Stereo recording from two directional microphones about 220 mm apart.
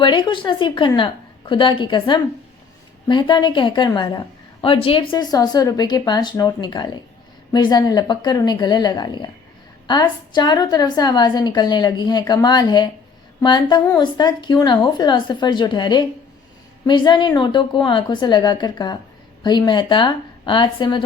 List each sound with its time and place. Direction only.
0.0 s a woman's voice: 20° left (ahead or behind)